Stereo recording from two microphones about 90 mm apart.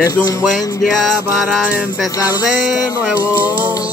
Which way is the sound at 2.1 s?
45° left (ahead or behind).